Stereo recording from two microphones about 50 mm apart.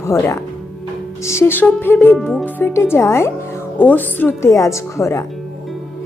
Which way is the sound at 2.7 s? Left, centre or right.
Left.